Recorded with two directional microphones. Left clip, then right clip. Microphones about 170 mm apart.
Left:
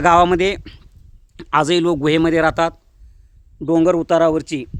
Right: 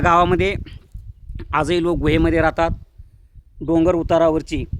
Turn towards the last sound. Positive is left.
turn(degrees=10)  # may be behind; listen again after turning